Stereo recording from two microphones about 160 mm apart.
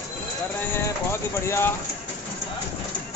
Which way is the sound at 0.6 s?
15° left (ahead or behind).